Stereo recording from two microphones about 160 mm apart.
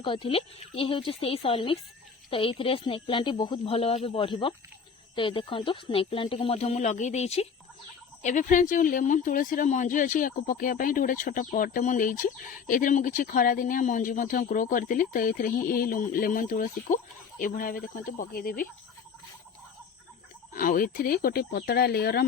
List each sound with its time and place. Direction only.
0.0 s speech: 30° left (ahead or behind); by 18.7 s 65° left (ahead or behind)
20.5 s speech: 65° left (ahead or behind); by 22.3 s 80° left